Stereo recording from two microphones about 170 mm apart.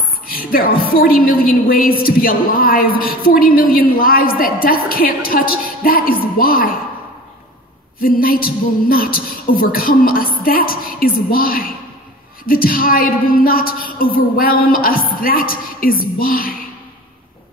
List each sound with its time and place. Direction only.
0.3 s a woman's voice: 60° left (ahead or behind)
8.0 s a woman's voice: 55° left (ahead or behind)